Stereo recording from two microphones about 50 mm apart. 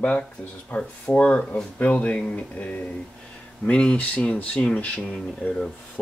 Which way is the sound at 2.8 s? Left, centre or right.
Centre.